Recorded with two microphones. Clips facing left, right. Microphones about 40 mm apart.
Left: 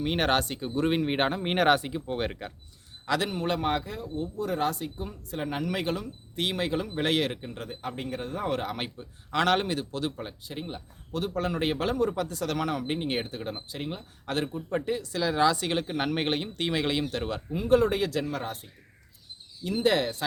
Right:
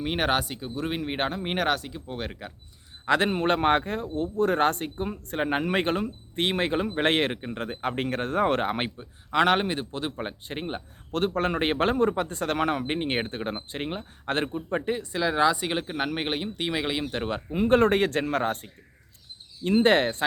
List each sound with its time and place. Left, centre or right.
0.0 s speech: centre
3.1 s speech: right
7.7 s speech: right
9.3 s a man's voice: centre
10.2 s speech: right; by 17.1 s centre
17.1 s a man's voice: right
17.7 s speech: right